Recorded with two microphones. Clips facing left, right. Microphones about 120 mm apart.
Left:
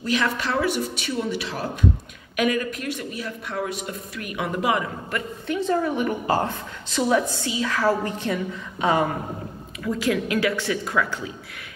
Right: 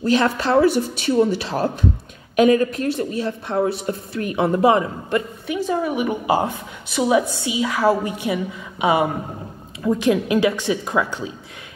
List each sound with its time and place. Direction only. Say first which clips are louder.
0.0 s a woman's voice: right 6 dB; 30° right (ahead or behind)
5.5 s a woman's voice: right 1 dB; 10° right (ahead or behind)